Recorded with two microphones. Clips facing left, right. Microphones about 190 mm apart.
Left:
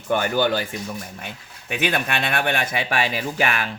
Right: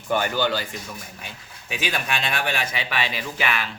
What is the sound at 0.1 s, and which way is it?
Speech, 50° left (ahead or behind).